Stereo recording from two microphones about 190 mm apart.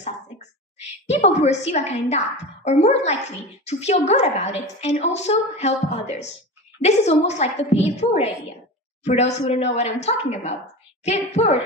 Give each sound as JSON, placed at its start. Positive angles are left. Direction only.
{"t": 0.8, "sound": "a woman's voice", "side_deg": 35}